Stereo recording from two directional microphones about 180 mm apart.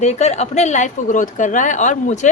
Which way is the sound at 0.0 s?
40° left (ahead or behind).